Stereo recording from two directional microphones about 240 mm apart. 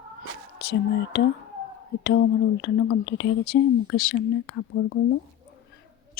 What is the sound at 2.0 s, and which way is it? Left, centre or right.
Speech, left.